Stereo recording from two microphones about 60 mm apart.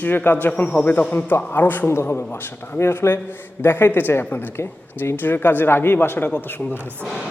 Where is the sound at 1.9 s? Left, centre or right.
Left.